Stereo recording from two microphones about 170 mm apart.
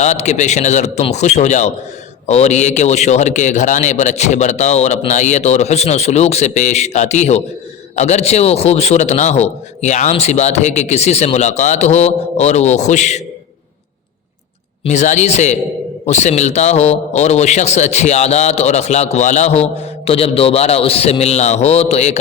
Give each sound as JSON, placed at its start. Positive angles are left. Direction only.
{"t": 0.0, "sound": "a man's voice", "side_deg": 40}
{"t": 14.8, "sound": "a man's voice", "side_deg": 45}